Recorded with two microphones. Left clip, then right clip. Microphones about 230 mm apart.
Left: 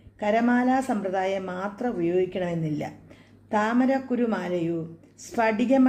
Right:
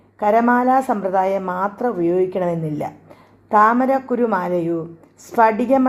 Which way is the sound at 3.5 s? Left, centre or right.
Right.